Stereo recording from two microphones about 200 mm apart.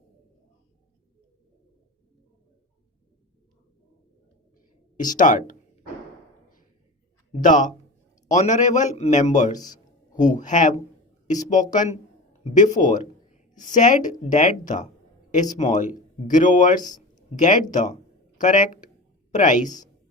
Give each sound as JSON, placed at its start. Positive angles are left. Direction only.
{"t": 4.9, "sound": "speech", "side_deg": 40}
{"t": 7.4, "sound": "a man's voice", "side_deg": 40}